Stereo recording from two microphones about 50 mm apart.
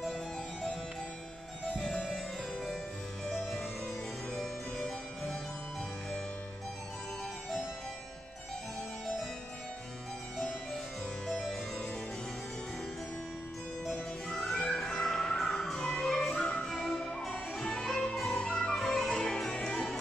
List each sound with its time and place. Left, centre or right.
0.0 s music: centre
2.1 s music: centre
4.3 s music: centre
14.4 s music: centre
16.3 s music: left
18.9 s music: centre